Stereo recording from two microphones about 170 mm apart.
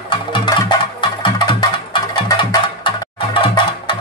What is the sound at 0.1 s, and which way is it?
Music, 30° left (ahead or behind).